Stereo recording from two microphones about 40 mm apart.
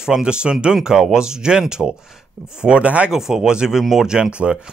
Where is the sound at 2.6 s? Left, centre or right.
Right.